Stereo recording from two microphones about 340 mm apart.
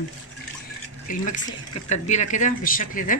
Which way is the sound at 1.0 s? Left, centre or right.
Left.